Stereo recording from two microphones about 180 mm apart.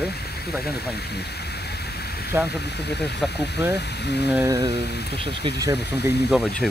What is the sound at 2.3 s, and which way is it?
Speech, 10° right (ahead or behind).